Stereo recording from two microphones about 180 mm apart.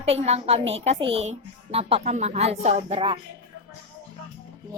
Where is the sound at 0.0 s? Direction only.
35° right (ahead or behind).